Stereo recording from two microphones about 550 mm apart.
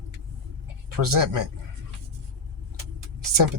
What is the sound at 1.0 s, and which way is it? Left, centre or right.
Speech, right.